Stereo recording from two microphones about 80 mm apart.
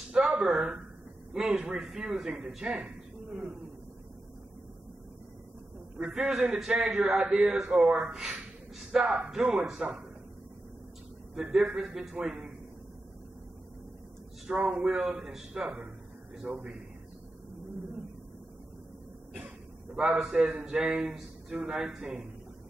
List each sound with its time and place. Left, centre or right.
0.1 s a sound: centre
1.3 s a man's voice: centre
5.9 s a man's voice: centre
11.3 s a man's voice: centre
14.5 s speech: right
14.8 s a man's voice: centre
20.0 s a man's voice: centre